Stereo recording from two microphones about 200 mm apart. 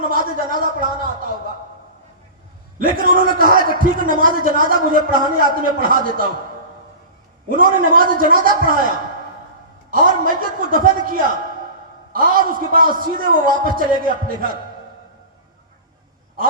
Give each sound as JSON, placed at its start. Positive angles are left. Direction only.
{"t": 0.1, "sound": "a man's voice", "side_deg": -45}
{"t": 2.7, "sound": "a man's voice", "side_deg": -45}
{"t": 7.5, "sound": "a man's voice", "side_deg": -45}
{"t": 9.9, "sound": "a man's voice", "side_deg": -45}